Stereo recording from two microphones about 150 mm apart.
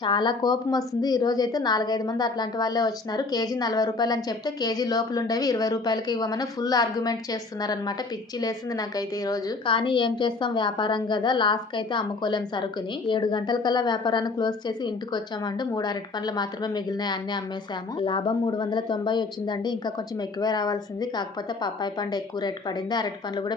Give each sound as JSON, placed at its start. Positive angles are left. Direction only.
{"t": 0.0, "sound": "a woman's voice", "side_deg": 30}